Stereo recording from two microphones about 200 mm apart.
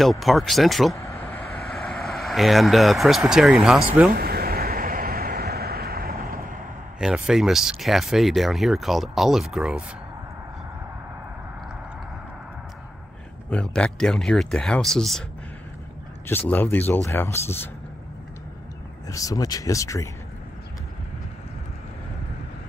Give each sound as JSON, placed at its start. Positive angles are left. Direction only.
{"t": 0.0, "sound": "speech", "side_deg": 0}
{"t": 0.9, "sound": "vehicle", "side_deg": 10}
{"t": 4.1, "sound": "a sound", "side_deg": -50}
{"t": 7.0, "sound": "speech", "side_deg": -5}
{"t": 13.5, "sound": "speech", "side_deg": 5}
{"t": 16.3, "sound": "speech", "side_deg": 10}
{"t": 19.0, "sound": "speech", "side_deg": 15}